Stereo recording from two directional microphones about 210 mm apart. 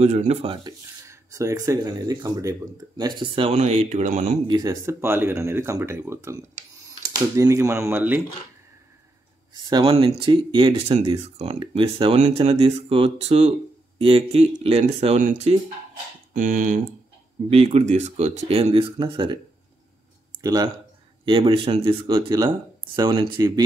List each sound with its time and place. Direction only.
0.0 s speech: 30° right (ahead or behind)
4.5 s speech: 20° right (ahead or behind)
9.5 s speech: 20° right (ahead or behind)
20.4 s speech: 15° right (ahead or behind)